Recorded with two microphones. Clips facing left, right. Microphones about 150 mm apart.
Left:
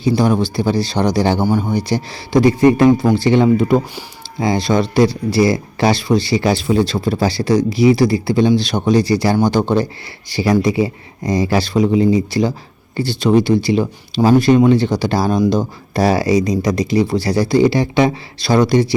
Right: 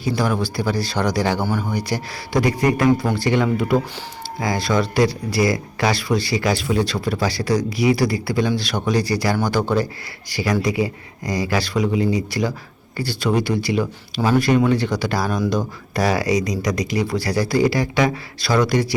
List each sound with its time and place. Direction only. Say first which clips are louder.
0.0 s speech: left 6 dB; 25° left (ahead or behind)